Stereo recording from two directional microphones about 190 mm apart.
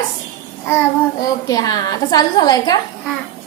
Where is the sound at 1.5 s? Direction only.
20° left (ahead or behind).